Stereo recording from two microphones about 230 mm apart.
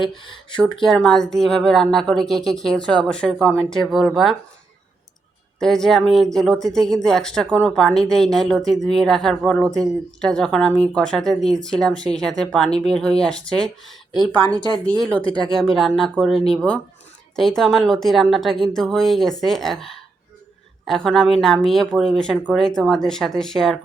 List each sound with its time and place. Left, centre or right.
0.0 s speech: centre
5.5 s speech: centre
15.5 s speech: centre